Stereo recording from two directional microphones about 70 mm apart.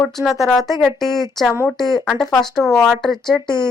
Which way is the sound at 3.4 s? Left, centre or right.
Left.